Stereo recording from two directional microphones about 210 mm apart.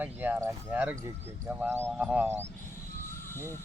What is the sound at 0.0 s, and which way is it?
Speech, 10° right (ahead or behind).